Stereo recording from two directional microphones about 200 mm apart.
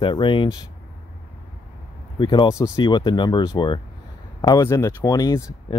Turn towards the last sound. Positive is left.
turn(degrees=20)  # may be behind; listen again after turning